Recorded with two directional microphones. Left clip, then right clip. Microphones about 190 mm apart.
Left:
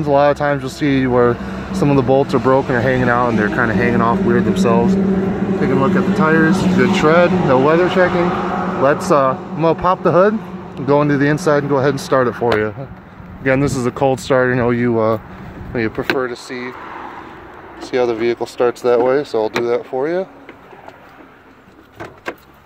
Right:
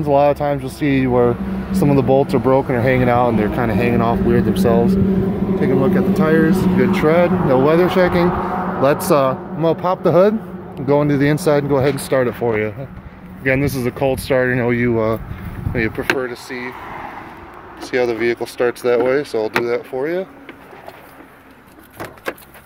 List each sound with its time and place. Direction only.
0.0 s speech: 5° right (ahead or behind)
8.3 s a sound: 65° left (ahead or behind)
8.8 s speech: 15° right (ahead or behind)
9.6 s speech: centre (ahead or behind)
11.9 s speech: 5° left (ahead or behind)
16.6 s a sound: 35° right (ahead or behind)
17.9 s speech: 5° left (ahead or behind)